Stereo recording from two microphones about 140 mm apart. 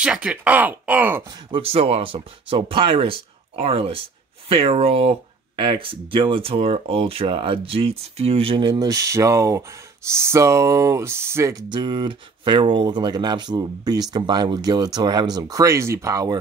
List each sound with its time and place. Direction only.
0.0 s speech: 10° right (ahead or behind)
1.2 s speech: 30° right (ahead or behind)
1.6 s speech: 45° right (ahead or behind); by 11.6 s 20° right (ahead or behind)
11.7 s speech: 35° right (ahead or behind)